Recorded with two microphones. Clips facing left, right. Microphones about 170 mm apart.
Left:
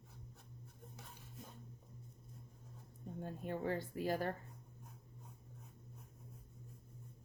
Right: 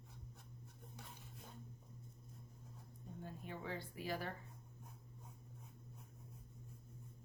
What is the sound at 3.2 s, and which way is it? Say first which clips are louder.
A woman's voice: left 8 dB; 50° left (ahead or behind).